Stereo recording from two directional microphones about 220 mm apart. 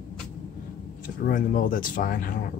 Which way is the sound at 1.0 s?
40° left (ahead or behind).